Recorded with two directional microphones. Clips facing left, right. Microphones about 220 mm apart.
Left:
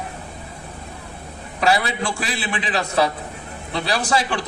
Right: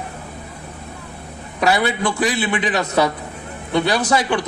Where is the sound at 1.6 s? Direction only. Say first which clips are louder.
Right 2 dB; 25° left (ahead or behind).